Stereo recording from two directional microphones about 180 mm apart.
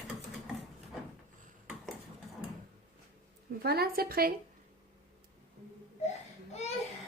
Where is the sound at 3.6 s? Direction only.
60° right (ahead or behind).